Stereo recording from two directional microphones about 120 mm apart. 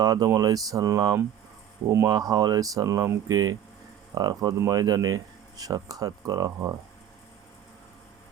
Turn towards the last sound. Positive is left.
turn(degrees=-30)  # may be behind; listen again after turning